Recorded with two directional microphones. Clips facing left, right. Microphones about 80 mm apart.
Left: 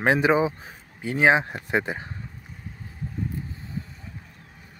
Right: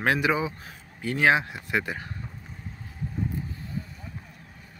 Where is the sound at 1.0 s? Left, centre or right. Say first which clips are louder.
Left 2 dB; centre.